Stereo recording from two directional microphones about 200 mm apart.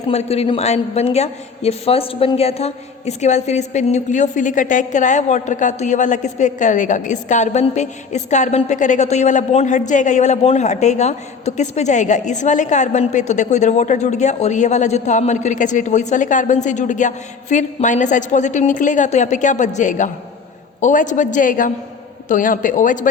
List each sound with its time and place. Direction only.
0.1 s a woman's voice: 30° left (ahead or behind)